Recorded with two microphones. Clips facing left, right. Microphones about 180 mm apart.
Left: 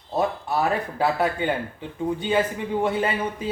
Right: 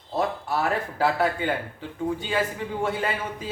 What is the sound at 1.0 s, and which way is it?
Speech, 20° left (ahead or behind).